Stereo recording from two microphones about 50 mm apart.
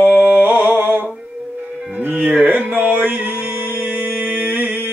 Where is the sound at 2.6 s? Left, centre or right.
Right.